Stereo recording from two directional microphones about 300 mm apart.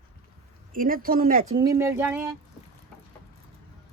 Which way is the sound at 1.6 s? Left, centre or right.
Centre.